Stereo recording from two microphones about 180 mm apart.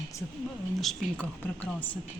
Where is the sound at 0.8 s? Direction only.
5° left (ahead or behind).